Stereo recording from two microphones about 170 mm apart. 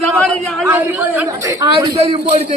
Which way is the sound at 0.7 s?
10° right (ahead or behind).